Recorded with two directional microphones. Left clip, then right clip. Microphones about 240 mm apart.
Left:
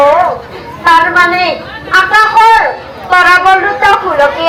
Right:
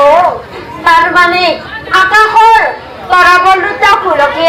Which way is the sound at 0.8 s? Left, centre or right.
Right.